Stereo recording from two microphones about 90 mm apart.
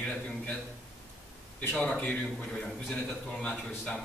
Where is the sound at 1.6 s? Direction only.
15° left (ahead or behind).